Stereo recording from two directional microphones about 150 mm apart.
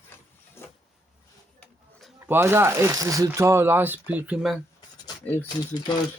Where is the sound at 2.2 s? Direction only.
15° right (ahead or behind).